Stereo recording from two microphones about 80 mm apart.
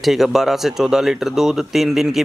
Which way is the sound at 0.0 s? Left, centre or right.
Centre.